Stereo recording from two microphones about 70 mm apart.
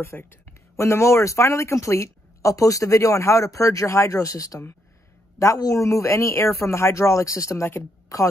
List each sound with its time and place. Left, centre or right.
0.0 s a woman's voice: left